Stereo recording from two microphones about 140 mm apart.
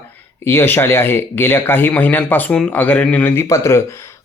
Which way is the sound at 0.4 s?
15° left (ahead or behind).